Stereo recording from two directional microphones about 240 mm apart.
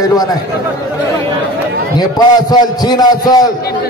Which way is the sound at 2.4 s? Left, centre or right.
Centre.